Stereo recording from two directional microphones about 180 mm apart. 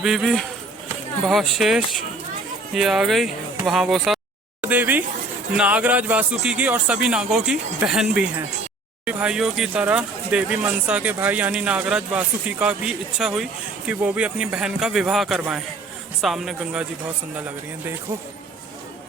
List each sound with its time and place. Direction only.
0.0 s speech: centre (ahead or behind)